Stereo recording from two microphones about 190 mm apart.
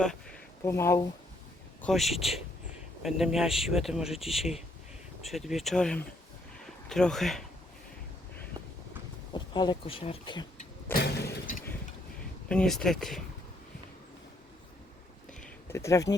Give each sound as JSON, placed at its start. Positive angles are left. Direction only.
{"t": 0.0, "sound": "a sound", "side_deg": 5}
{"t": 0.6, "sound": "speech", "side_deg": 15}
{"t": 1.8, "sound": "speech", "side_deg": 0}
{"t": 9.3, "sound": "speech", "side_deg": 25}
{"t": 10.9, "sound": "vehicle", "side_deg": 55}
{"t": 12.5, "sound": "speech", "side_deg": 5}
{"t": 15.7, "sound": "speech", "side_deg": 15}